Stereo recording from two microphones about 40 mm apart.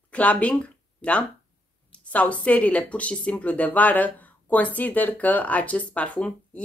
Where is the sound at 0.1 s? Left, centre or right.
Left.